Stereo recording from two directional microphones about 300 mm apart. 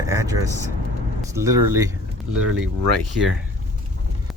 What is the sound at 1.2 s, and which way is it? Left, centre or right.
Vehicle, centre.